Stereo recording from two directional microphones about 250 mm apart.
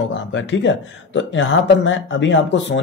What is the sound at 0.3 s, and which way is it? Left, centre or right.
A man's voice, left.